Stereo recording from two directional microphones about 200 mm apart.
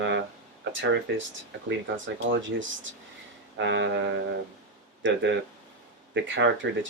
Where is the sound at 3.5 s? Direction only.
60° right (ahead or behind).